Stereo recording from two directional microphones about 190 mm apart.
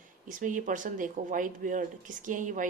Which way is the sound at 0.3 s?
45° right (ahead or behind).